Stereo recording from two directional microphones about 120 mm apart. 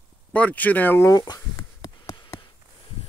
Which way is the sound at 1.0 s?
35° left (ahead or behind).